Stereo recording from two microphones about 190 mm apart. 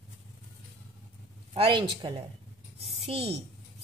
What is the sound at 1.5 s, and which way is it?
A child's voice, 30° right (ahead or behind).